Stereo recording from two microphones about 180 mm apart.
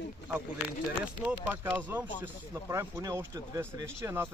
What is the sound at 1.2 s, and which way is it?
Speech, 10° right (ahead or behind).